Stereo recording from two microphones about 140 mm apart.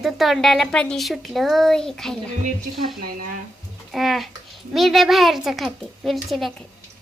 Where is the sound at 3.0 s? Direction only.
90° right.